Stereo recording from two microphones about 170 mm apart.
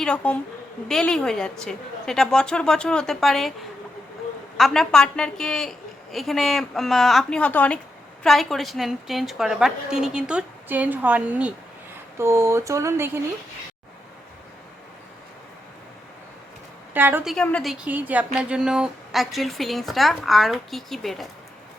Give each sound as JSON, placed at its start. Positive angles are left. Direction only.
{"t": 0.0, "sound": "a woman's voice", "side_deg": 5}
{"t": 4.5, "sound": "speech", "side_deg": 0}
{"t": 16.9, "sound": "speech", "side_deg": -10}
{"t": 17.2, "sound": "speech", "side_deg": 5}